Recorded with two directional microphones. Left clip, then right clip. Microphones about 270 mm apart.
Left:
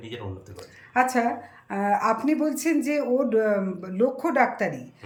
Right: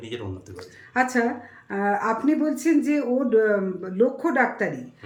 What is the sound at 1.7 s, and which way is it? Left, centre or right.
Speech, centre.